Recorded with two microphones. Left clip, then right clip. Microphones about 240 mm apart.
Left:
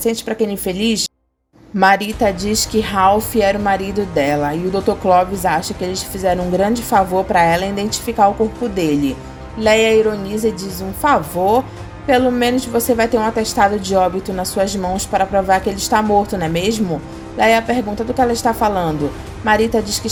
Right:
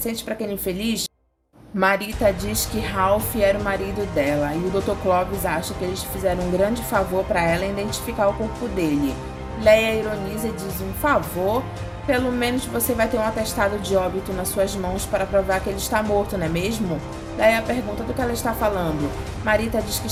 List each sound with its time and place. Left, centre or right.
0.0 s a woman's voice: left
11.0 s a woman's voice: left